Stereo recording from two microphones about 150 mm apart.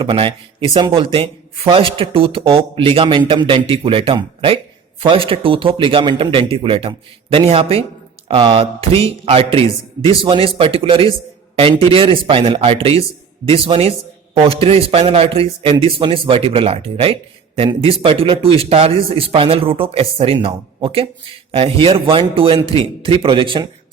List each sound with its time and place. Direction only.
0.0 s speech: 35° right (ahead or behind)
9.6 s speech: 25° left (ahead or behind)
10.2 s speech: 35° right (ahead or behind)